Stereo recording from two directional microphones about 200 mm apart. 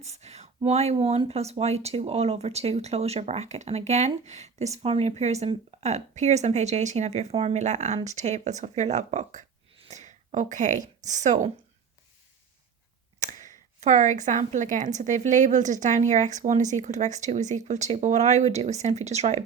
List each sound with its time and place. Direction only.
0.0 s a woman's voice: 35° right (ahead or behind)
13.8 s speech: 40° right (ahead or behind)